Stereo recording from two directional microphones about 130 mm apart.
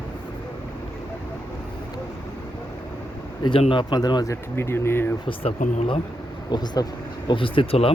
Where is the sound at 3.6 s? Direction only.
40° left (ahead or behind).